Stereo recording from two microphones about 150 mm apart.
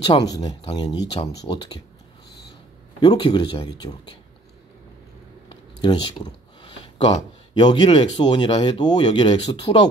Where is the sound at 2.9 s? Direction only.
30° left (ahead or behind).